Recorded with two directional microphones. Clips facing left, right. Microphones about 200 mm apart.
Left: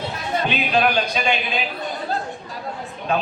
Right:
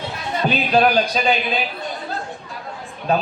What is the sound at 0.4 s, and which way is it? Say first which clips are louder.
Speech: right 4 dB; 35° right (ahead or behind).